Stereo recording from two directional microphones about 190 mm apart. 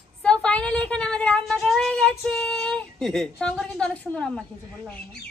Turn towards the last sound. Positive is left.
turn(degrees=5)  # may be behind; listen again after turning